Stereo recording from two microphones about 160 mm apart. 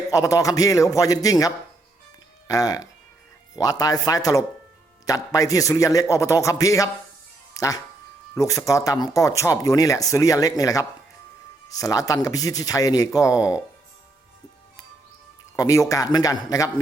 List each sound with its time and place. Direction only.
0.1 s speech: 20° left (ahead or behind)
7.5 s music: 20° left (ahead or behind)
8.4 s speech: 20° left (ahead or behind)
15.5 s speech: 20° left (ahead or behind)